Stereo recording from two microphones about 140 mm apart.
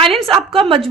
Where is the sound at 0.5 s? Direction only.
40° right (ahead or behind).